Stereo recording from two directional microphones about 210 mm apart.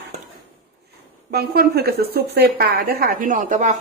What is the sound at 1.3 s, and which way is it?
A woman's voice, 50° right (ahead or behind).